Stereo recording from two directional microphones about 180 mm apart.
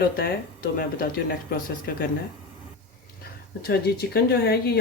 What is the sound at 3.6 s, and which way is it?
Speech, 60° left (ahead or behind).